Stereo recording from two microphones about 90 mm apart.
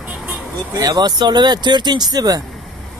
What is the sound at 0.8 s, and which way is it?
Speech, 45° right (ahead or behind).